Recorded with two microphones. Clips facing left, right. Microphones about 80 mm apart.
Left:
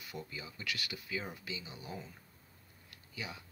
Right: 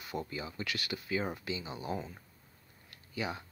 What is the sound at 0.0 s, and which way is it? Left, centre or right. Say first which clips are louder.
Speech: right 7 dB; right.